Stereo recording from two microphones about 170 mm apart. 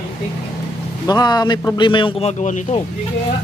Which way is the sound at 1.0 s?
25° left (ahead or behind).